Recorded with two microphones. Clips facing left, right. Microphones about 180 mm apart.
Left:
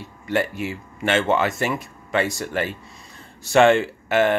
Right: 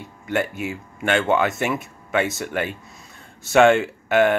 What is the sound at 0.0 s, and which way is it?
Speech, centre (ahead or behind).